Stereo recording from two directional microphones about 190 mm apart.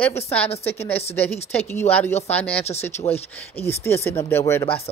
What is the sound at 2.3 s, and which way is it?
A woman's voice, 5° left (ahead or behind).